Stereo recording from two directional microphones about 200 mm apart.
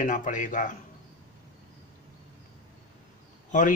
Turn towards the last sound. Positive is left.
turn(degrees=40)  # may be behind; listen again after turning